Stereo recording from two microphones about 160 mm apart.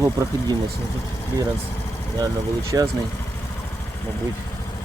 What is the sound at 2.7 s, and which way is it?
Speech, 15° right (ahead or behind).